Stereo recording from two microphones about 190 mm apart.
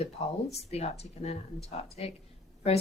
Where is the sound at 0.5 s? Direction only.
35° left (ahead or behind).